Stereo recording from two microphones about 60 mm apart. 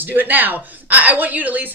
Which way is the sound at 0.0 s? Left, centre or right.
Right.